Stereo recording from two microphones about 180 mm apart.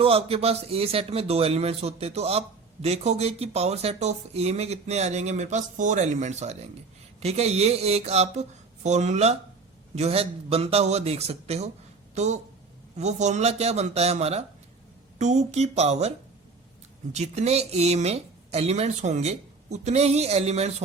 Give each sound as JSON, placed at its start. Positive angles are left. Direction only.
{"t": 0.0, "sound": "speech", "side_deg": -30}